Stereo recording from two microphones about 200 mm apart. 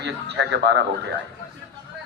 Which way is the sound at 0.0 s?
60° right (ahead or behind).